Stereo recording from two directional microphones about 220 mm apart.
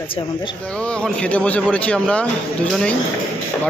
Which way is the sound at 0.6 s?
5° left (ahead or behind).